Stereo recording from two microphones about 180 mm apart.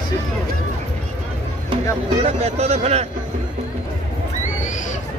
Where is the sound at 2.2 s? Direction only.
35° right (ahead or behind).